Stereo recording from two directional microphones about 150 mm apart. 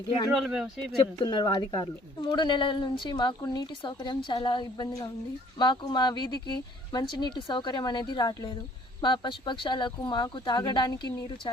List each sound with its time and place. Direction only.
0.3 s speech: 5° right (ahead or behind)
0.9 s speech: 30° left (ahead or behind)